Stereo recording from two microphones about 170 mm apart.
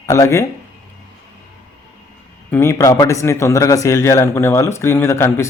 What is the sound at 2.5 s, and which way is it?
Speech, 15° left (ahead or behind).